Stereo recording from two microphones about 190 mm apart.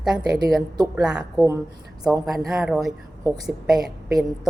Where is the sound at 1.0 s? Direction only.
5° right (ahead or behind).